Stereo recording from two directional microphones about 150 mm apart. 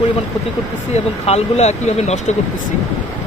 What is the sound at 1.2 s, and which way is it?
Speech, 45° left (ahead or behind).